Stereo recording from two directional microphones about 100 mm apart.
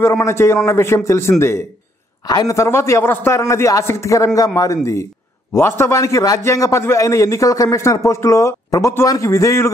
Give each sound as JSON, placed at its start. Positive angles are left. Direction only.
{"t": 0.0, "sound": "a man's voice", "side_deg": 30}
{"t": 2.2, "sound": "a man's voice", "side_deg": 35}
{"t": 5.5, "sound": "a man's voice", "side_deg": 25}